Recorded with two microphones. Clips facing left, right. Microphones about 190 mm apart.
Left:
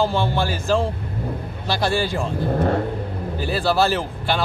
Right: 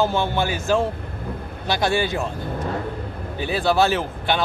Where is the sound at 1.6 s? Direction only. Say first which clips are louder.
Even; centre (ahead or behind).